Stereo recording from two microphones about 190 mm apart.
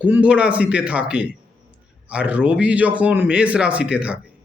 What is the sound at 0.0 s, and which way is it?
A man's voice, 5° right (ahead or behind).